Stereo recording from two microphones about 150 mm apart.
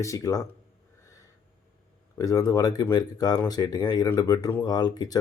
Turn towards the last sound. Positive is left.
turn(degrees=25)  # may be behind; listen again after turning